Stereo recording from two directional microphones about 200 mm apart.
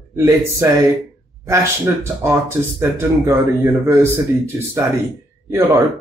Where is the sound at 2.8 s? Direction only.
15° right (ahead or behind).